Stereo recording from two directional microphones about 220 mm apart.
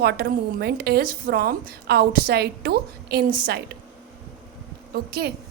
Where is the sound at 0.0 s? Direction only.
45° right (ahead or behind).